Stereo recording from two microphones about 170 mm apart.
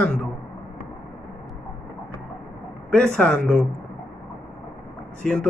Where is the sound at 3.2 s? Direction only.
5° left (ahead or behind).